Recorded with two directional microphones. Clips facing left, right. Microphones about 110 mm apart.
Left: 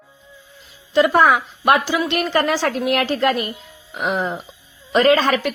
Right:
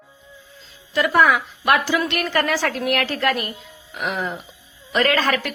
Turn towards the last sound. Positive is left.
turn(degrees=20)  # may be behind; listen again after turning